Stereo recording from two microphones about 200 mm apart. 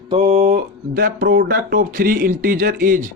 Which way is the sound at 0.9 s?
50° right (ahead or behind).